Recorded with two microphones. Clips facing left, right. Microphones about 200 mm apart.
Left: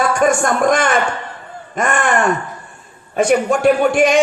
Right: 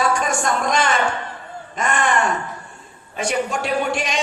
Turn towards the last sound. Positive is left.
turn(degrees=50)  # may be behind; listen again after turning